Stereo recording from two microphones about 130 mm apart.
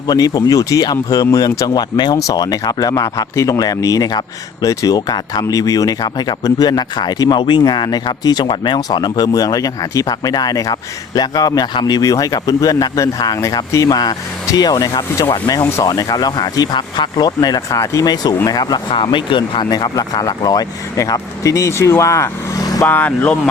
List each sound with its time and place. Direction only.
0.1 s speech: 30° left (ahead or behind)
22.9 s speech: 10° left (ahead or behind)